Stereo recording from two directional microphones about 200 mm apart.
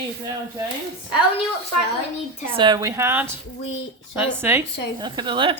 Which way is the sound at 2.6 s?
20° right (ahead or behind).